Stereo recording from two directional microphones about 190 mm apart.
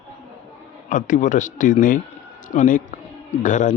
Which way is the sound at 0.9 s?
45° left (ahead or behind).